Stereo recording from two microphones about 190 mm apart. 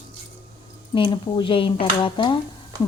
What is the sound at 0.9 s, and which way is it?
A woman's voice, 25° left (ahead or behind).